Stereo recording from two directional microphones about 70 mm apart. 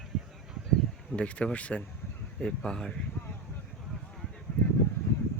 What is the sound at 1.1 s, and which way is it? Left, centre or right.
Speech, centre.